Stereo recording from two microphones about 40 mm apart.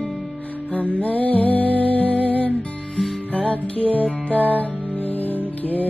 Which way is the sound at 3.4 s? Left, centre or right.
Left.